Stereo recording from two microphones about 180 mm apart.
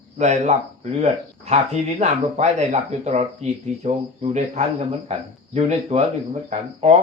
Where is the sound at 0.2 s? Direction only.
40° right (ahead or behind).